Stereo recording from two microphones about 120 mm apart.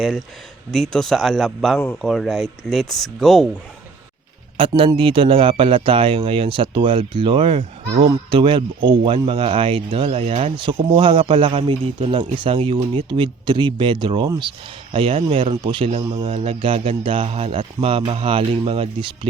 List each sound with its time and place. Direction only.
0.0 s speech: centre (ahead or behind)
4.6 s speech: 45° right (ahead or behind)
16.3 s speech: 60° right (ahead or behind)